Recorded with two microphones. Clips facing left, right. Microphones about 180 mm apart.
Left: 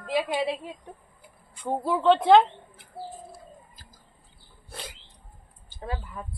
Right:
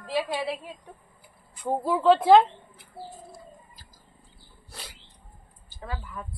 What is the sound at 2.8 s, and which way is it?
Bird, centre (ahead or behind).